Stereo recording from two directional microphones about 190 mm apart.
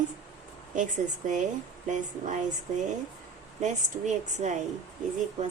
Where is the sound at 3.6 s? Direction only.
40° right (ahead or behind).